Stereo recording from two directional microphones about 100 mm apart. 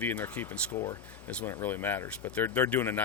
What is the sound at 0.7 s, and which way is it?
Speech, 30° left (ahead or behind).